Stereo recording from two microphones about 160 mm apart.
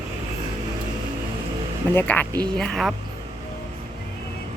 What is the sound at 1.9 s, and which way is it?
A woman's voice, 10° left (ahead or behind).